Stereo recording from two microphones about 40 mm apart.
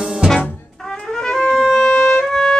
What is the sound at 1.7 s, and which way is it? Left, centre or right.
Music, left.